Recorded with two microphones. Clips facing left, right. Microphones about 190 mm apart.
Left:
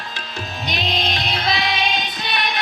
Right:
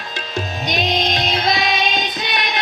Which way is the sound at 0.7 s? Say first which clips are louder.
Right 4 dB; 45° right (ahead or behind).